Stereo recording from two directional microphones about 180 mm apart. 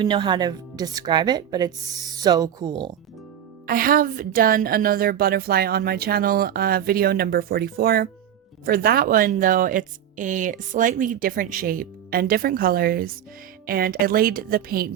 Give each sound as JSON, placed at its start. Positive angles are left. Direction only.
{"t": 0.0, "sound": "a woman's voice", "side_deg": -25}
{"t": 3.7, "sound": "a woman's voice", "side_deg": -50}